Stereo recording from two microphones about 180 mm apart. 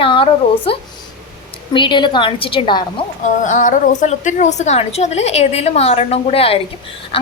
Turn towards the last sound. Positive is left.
turn(degrees=30)  # may be behind; listen again after turning